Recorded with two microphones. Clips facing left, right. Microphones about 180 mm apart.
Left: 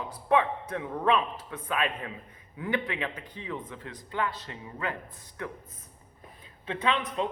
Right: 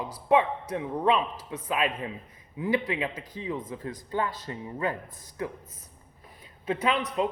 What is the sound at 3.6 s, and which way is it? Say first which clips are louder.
Music: right 6 dB; 40° right (ahead or behind).